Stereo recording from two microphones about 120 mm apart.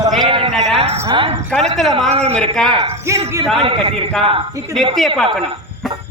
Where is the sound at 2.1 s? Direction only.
55° right (ahead or behind).